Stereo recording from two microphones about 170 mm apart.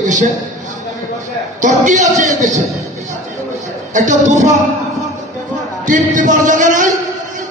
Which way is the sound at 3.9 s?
45° right (ahead or behind).